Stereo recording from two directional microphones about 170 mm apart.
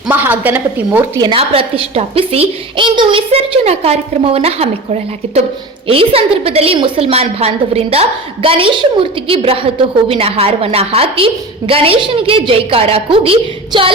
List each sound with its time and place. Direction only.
0.1 s a woman's voice: 10° right (ahead or behind)
1.2 s a woman's voice: 30° right (ahead or behind)